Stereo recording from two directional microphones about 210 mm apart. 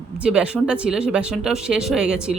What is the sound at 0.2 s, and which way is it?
Speech, 5° right (ahead or behind).